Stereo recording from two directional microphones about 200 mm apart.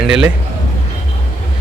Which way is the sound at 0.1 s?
5° right (ahead or behind).